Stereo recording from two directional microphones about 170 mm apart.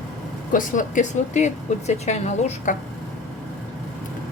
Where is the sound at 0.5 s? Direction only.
50° left (ahead or behind).